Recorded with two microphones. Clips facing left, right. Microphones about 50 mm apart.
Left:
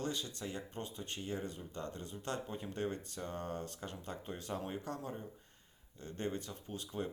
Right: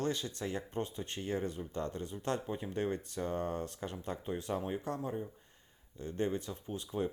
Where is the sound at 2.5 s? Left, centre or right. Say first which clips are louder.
Right 4 dB; centre.